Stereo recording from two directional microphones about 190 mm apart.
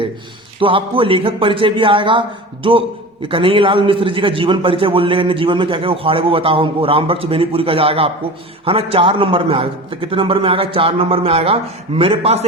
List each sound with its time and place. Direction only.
0.6 s a man's voice: 25° right (ahead or behind)
3.2 s a man's voice: 25° right (ahead or behind)